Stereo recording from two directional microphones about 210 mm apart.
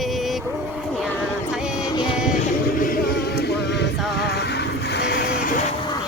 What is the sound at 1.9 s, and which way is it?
Music, 20° left (ahead or behind).